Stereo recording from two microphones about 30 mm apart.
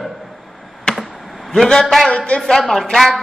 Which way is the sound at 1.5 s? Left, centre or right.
Centre.